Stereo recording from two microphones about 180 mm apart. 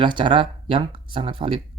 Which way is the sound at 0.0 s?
25° right (ahead or behind).